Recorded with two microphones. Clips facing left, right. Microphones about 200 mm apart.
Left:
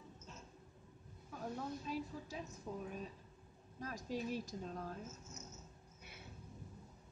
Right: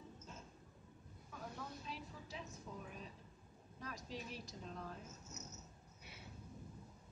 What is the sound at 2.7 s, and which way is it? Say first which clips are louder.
A woman's voice: left 6 dB; 40° left (ahead or behind).